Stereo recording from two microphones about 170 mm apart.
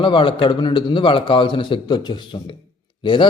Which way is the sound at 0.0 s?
30° left (ahead or behind).